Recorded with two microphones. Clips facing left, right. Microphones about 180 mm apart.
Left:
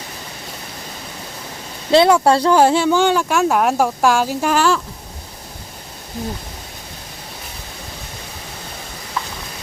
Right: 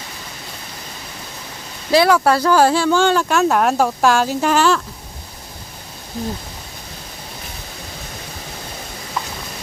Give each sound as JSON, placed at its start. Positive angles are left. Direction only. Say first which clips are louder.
{"t": 1.9, "sound": "speech", "louder": "left 2 dB", "side_deg": 25}